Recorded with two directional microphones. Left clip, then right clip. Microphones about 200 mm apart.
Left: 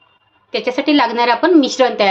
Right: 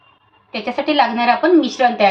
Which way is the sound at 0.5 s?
55° left (ahead or behind).